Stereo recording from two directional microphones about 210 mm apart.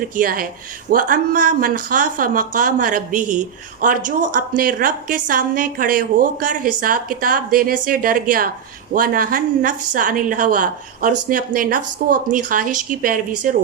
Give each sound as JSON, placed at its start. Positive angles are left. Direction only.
{"t": 0.2, "sound": "a woman's voice", "side_deg": -45}